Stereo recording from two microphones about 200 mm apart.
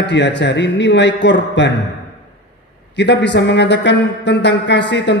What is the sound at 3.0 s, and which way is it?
A man's voice, 60° left (ahead or behind).